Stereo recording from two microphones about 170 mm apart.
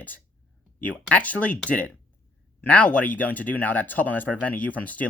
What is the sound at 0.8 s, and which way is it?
Speech, 10° left (ahead or behind).